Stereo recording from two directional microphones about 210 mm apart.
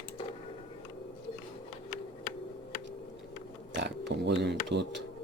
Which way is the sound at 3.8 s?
55° right (ahead or behind).